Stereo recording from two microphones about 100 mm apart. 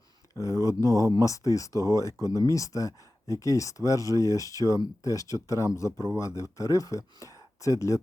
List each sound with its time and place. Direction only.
0.3 s speech: 30° left (ahead or behind)